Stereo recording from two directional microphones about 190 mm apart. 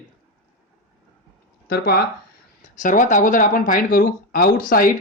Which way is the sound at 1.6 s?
55° left (ahead or behind).